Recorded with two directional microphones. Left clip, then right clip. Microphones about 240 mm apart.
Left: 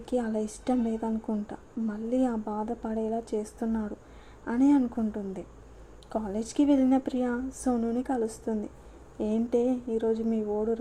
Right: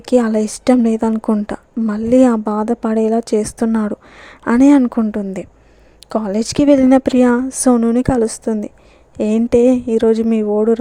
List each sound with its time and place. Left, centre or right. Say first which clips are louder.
0.0 s speech: right 16 dB; right